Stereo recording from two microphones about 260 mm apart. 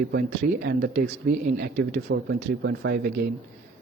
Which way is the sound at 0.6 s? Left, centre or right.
Right.